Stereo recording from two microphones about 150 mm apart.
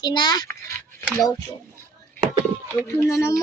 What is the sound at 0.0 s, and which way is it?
Speech, 30° left (ahead or behind).